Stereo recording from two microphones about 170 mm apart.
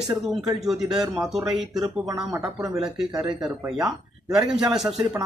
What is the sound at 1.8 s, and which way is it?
Speech, 20° right (ahead or behind).